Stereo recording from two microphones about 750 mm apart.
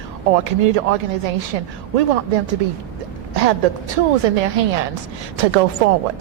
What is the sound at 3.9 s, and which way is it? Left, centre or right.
A woman's voice, right.